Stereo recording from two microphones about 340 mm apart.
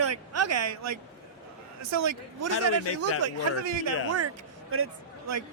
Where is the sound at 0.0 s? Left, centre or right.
Right.